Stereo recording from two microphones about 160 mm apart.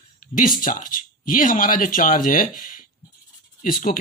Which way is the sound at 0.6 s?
60° left (ahead or behind).